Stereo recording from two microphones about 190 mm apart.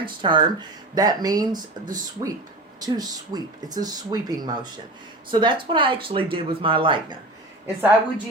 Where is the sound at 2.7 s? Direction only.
20° right (ahead or behind).